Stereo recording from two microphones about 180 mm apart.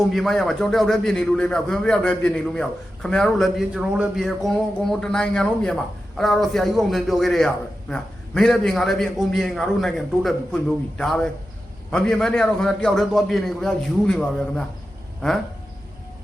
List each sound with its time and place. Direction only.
0.1 s a man's voice: centre (ahead or behind)